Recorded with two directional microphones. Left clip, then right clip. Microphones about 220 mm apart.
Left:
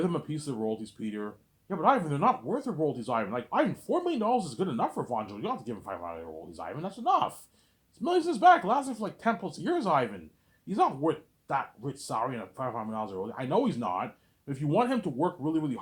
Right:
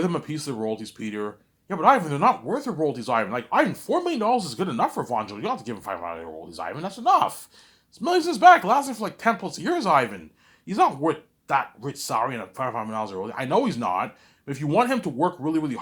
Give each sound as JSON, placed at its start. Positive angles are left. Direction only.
{"t": 0.0, "sound": "speech", "side_deg": -20}